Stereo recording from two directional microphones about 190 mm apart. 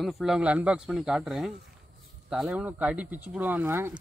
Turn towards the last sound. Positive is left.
turn(degrees=-10)  # may be behind; listen again after turning